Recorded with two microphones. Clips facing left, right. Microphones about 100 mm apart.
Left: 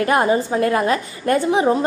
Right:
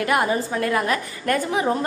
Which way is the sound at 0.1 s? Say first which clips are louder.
Left 4 dB; 30° left (ahead or behind).